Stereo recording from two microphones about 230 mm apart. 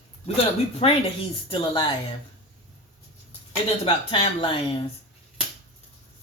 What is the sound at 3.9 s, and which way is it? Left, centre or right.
Speech, left.